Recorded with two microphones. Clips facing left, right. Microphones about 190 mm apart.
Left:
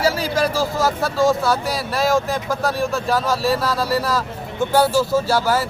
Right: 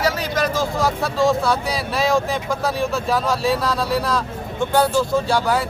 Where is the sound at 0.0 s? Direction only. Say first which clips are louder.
Left 2 dB; 30° left (ahead or behind).